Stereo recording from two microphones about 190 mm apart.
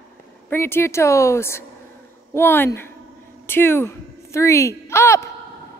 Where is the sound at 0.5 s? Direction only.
10° left (ahead or behind).